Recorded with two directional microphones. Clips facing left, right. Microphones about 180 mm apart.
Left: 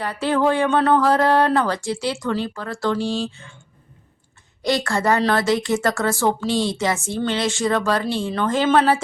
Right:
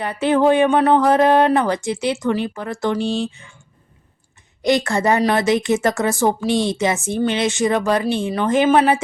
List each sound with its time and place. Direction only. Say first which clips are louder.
0.0 s speech: right 4 dB; 20° right (ahead or behind)
4.6 s speech: right 3 dB; 20° right (ahead or behind)